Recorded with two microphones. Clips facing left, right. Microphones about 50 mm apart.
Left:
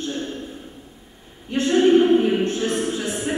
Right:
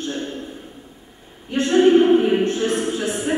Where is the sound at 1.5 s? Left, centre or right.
Centre.